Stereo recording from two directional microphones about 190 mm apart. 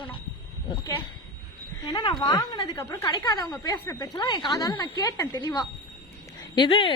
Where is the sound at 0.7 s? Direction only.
20° left (ahead or behind).